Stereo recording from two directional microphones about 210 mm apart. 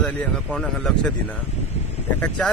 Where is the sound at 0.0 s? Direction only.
5° left (ahead or behind).